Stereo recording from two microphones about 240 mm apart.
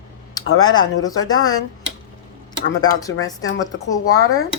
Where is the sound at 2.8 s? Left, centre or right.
Centre.